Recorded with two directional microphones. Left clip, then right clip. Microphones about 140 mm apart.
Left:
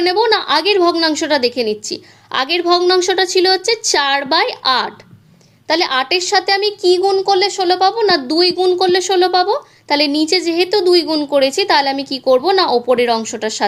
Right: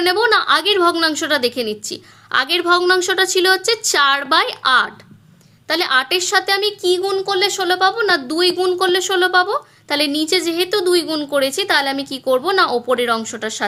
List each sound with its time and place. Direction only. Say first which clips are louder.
0.0 s speech: left 1 dB; 10° left (ahead or behind)